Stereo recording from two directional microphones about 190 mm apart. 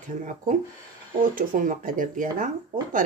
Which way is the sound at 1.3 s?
45° right (ahead or behind).